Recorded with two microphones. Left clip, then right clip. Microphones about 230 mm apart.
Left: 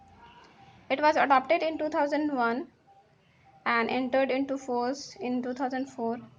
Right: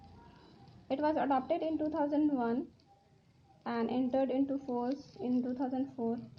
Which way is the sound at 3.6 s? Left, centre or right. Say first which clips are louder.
Left 8 dB; centre.